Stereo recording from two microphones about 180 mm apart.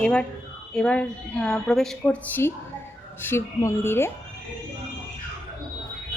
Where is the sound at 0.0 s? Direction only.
5° left (ahead or behind).